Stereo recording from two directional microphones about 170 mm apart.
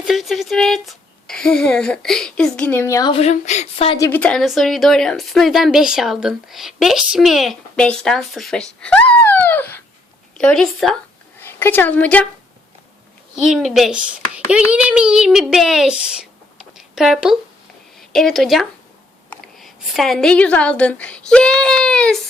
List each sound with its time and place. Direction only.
0.0 s a woman's voice: centre (ahead or behind); by 3.1 s 15° left (ahead or behind)
3.1 s speech: 40° left (ahead or behind)
3.9 s a woman's voice: 20° left (ahead or behind)
4.2 s a woman's voice: 5° left (ahead or behind)
13.3 s a woman's voice: centre (ahead or behind)
16.6 s a sound: centre (ahead or behind)
18.1 s a woman's voice: centre (ahead or behind)